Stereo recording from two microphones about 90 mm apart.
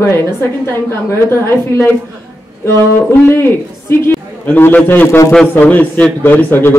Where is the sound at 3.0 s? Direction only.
25° left (ahead or behind).